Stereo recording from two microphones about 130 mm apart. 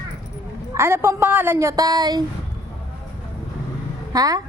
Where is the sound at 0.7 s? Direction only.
20° right (ahead or behind).